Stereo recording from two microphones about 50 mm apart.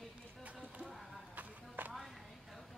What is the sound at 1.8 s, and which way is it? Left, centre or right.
Music, right.